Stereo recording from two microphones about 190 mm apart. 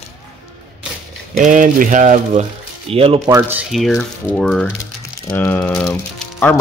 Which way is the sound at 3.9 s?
10° left (ahead or behind).